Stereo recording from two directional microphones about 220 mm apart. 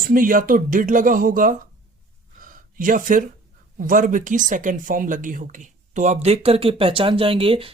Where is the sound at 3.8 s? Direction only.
40° right (ahead or behind).